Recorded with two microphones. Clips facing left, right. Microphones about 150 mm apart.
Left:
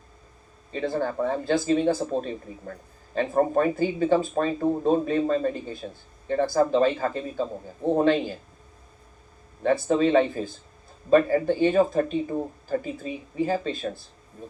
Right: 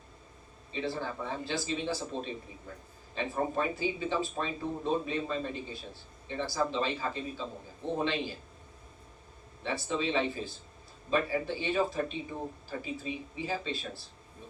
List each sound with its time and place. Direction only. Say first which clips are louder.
0.7 s speech: left 8 dB; 50° left (ahead or behind)
9.6 s speech: left 11 dB; 50° left (ahead or behind)